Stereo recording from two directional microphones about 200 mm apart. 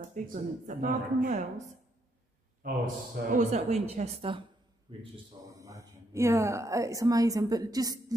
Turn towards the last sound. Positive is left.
turn(degrees=-20)  # may be behind; listen again after turning